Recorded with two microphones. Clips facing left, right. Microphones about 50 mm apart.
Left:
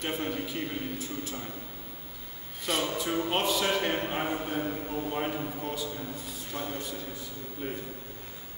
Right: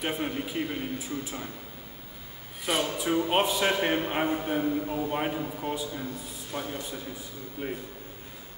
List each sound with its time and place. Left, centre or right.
0.0 s a man's voice: centre
2.6 s a man's voice: centre